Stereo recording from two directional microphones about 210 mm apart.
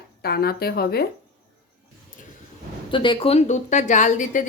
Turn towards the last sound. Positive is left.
turn(degrees=35)  # may be behind; listen again after turning